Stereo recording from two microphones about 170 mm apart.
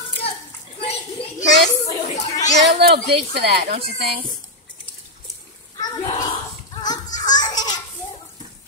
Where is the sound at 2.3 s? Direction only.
20° left (ahead or behind).